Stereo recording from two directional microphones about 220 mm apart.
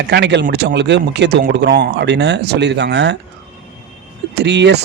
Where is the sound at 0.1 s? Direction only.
50° right (ahead or behind).